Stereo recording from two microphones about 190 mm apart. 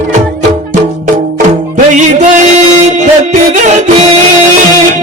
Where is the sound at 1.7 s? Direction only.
40° right (ahead or behind).